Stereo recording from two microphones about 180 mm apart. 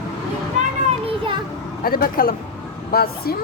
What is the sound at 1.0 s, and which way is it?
Children playing, 30° right (ahead or behind).